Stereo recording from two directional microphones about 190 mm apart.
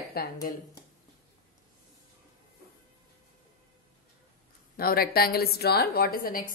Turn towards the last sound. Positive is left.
turn(degrees=50)  # may be behind; listen again after turning